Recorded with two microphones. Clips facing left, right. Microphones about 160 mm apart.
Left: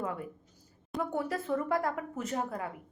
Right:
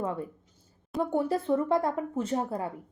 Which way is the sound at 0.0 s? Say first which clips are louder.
Right 4 dB; 30° right (ahead or behind).